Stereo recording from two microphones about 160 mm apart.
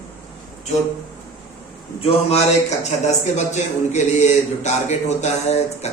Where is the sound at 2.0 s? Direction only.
45° left (ahead or behind).